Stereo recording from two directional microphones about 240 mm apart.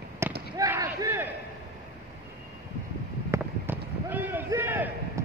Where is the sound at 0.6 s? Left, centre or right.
Centre.